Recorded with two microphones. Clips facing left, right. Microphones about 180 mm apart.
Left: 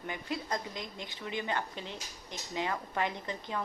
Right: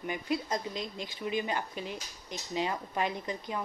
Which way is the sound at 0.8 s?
20° left (ahead or behind).